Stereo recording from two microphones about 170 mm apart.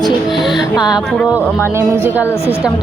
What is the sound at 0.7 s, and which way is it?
Speech, 25° left (ahead or behind).